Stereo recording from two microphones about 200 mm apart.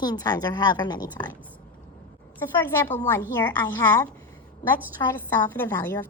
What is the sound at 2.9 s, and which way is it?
Speech, 10° left (ahead or behind).